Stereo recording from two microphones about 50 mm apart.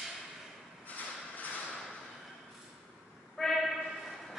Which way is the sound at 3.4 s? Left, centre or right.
Centre.